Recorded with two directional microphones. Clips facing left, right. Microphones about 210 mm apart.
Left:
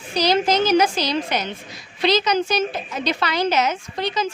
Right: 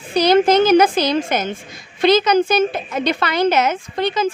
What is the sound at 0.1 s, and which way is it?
A woman's voice, 55° right (ahead or behind).